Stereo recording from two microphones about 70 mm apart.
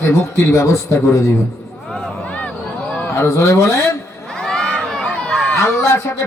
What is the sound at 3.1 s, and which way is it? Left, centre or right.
Speech, left.